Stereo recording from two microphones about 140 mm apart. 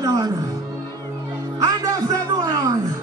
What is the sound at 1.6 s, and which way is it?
A man's voice, 25° right (ahead or behind).